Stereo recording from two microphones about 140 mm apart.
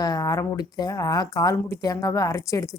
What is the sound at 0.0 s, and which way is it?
Speech, 25° left (ahead or behind).